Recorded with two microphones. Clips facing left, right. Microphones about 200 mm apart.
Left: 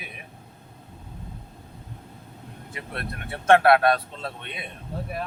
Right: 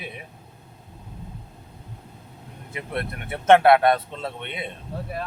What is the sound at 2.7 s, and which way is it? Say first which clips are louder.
Speech: right 5 dB; 20° right (ahead or behind).